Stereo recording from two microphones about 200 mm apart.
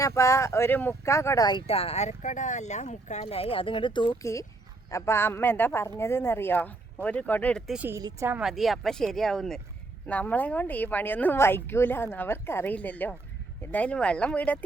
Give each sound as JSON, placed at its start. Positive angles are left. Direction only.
{"t": 0.0, "sound": "speech", "side_deg": 15}
{"t": 7.7, "sound": "speech", "side_deg": -10}